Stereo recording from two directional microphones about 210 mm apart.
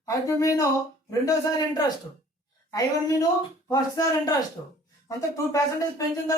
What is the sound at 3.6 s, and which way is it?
Speech, 15° left (ahead or behind).